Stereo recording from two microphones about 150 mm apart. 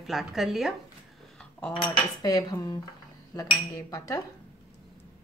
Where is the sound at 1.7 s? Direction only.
30° left (ahead or behind).